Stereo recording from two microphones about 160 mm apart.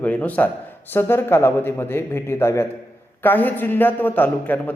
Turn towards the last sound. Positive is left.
turn(degrees=10)  # may be behind; listen again after turning